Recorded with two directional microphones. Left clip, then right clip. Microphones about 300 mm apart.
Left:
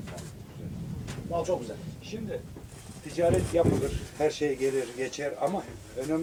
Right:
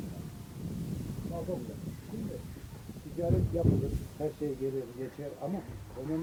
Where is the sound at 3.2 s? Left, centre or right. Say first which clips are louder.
Left 8 dB; centre.